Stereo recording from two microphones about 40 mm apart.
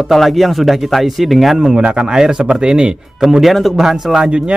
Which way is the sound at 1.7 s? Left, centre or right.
Centre.